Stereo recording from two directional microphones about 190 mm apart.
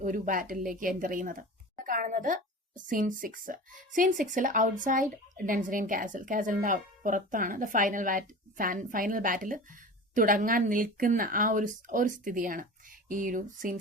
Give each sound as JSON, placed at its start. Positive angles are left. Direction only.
{"t": 0.0, "sound": "speech", "side_deg": -45}